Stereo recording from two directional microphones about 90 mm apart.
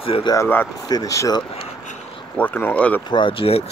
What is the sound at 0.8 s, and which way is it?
Speech, 45° left (ahead or behind).